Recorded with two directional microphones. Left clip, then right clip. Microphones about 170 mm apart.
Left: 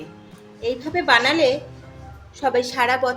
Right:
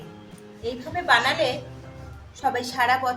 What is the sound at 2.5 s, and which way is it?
Speech, 55° left (ahead or behind).